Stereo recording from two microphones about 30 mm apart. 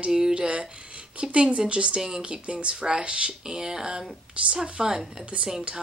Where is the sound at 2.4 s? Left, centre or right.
Right.